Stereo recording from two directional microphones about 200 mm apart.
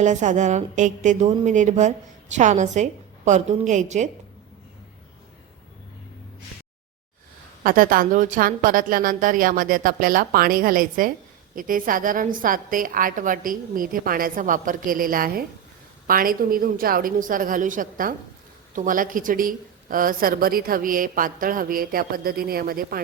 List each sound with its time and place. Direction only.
0.0 s a woman's voice: 35° right (ahead or behind)
7.6 s a woman's voice: 45° right (ahead or behind)